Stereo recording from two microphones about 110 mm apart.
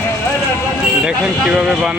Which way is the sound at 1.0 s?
5° right (ahead or behind).